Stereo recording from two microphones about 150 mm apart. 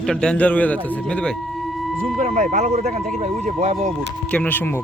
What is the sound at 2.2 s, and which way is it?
Speech, 50° right (ahead or behind).